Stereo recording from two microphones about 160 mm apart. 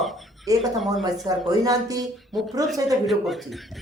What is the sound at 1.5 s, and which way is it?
Speech, 20° right (ahead or behind).